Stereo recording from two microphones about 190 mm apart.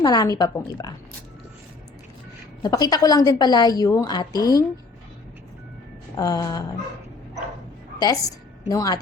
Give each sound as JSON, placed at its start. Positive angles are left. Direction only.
{"t": 0.0, "sound": "a woman's voice", "side_deg": 20}
{"t": 2.6, "sound": "a woman's voice", "side_deg": 20}
{"t": 6.1, "sound": "a woman's voice", "side_deg": 20}
{"t": 7.9, "sound": "a woman's voice", "side_deg": 20}